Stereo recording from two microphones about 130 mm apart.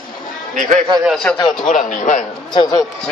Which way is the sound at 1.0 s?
5° left (ahead or behind).